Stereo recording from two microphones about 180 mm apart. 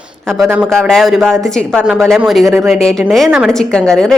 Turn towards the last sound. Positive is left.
turn(degrees=5)  # may be behind; listen again after turning